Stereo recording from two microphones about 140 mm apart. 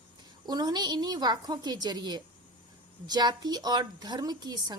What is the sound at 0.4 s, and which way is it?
A woman's voice, 30° right (ahead or behind).